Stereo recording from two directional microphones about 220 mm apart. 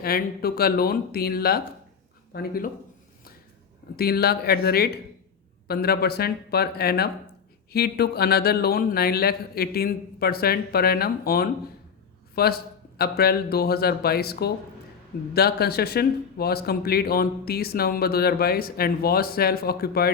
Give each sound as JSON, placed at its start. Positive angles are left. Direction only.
{"t": 0.0, "sound": "a man's voice", "side_deg": 45}
{"t": 3.9, "sound": "a man's voice", "side_deg": 45}